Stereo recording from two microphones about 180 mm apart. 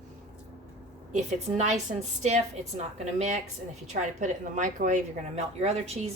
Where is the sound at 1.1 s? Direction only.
40° right (ahead or behind).